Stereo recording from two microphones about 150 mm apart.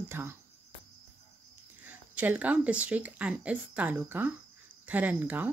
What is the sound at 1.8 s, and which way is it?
Speech, 10° right (ahead or behind).